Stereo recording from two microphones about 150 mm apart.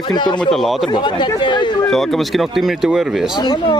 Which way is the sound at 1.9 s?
Centre (ahead or behind).